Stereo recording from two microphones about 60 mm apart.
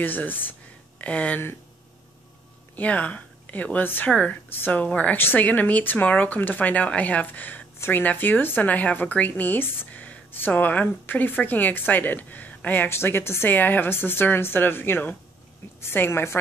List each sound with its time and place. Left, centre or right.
0.0 s speech: left
2.7 s a woman's voice: left
5.1 s a woman's voice: left
12.9 s a woman's voice: left
15.8 s a woman's voice: left